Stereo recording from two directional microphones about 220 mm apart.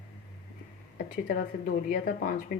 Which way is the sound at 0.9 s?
40° left (ahead or behind).